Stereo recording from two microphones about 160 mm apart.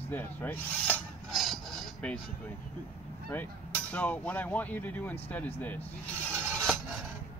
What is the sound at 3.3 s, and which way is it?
Speech, 10° left (ahead or behind).